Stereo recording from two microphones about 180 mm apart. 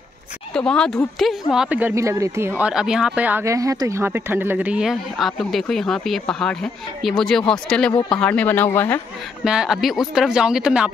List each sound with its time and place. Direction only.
0.6 s speech: 5° left (ahead or behind)
9.4 s speech: 5° right (ahead or behind)